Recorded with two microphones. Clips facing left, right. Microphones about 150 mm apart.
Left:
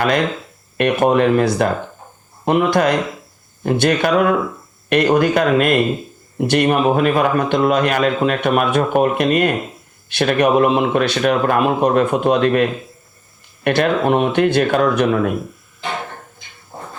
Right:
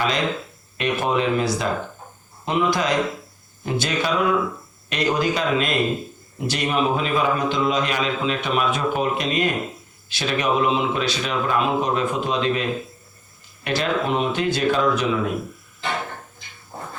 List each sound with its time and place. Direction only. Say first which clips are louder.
0.8 s a man's voice: left 8 dB; 55° left (ahead or behind)
13.7 s a man's voice: left 7 dB; 55° left (ahead or behind)